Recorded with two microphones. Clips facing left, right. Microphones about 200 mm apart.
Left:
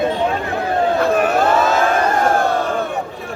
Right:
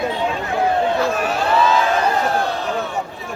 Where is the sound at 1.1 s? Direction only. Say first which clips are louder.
Left 4 dB; 55° left (ahead or behind).